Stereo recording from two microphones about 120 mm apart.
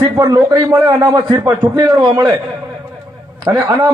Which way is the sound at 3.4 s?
35° right (ahead or behind).